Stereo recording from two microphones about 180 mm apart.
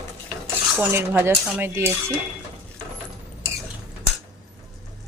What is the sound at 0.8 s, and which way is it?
Speech, 10° right (ahead or behind).